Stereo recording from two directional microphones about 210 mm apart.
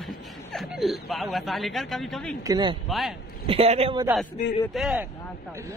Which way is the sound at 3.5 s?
30° right (ahead or behind).